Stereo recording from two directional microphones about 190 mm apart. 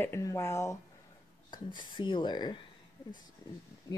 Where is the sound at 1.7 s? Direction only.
25° left (ahead or behind).